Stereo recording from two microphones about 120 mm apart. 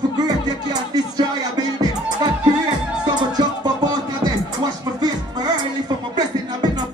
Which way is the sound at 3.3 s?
35° right (ahead or behind).